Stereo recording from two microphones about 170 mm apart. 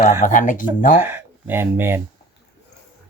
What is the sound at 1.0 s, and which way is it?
Speech, 10° right (ahead or behind).